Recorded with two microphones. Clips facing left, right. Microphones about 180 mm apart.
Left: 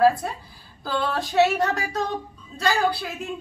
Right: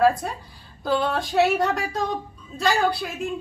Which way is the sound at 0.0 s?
Centre (ahead or behind).